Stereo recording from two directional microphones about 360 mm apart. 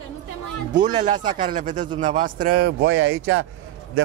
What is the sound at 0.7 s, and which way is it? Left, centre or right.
A man's voice, centre.